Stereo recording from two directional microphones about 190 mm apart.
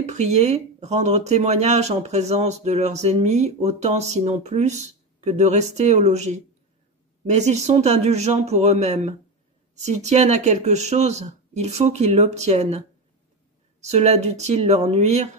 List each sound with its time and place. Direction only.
0.0 s speech: 35° right (ahead or behind)